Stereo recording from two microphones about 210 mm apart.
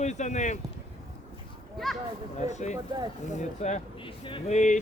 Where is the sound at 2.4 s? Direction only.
35° left (ahead or behind).